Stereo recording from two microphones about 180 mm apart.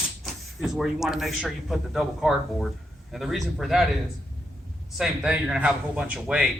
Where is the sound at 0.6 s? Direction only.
Centre (ahead or behind).